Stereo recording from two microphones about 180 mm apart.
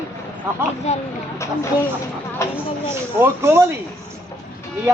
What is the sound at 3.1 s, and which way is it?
Speech, 15° right (ahead or behind).